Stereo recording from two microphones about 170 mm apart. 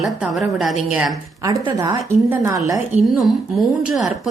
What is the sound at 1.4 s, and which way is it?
A woman's voice, 20° right (ahead or behind).